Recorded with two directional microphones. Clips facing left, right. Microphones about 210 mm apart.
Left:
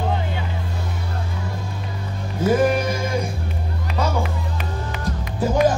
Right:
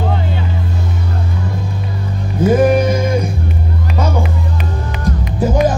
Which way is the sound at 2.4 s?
20° right (ahead or behind).